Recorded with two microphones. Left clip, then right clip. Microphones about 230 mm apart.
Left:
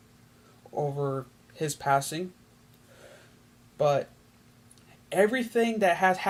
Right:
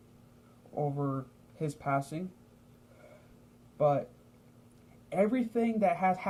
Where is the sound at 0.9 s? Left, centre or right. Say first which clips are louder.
Left 5 dB; left.